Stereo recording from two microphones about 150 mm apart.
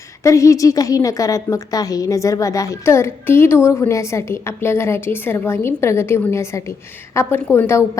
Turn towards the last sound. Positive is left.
turn(degrees=20)  # may be behind; listen again after turning